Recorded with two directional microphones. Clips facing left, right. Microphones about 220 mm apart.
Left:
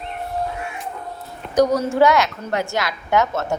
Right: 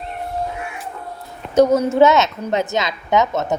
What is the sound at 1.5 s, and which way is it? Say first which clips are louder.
A woman's voice: right 3 dB; 25° right (ahead or behind).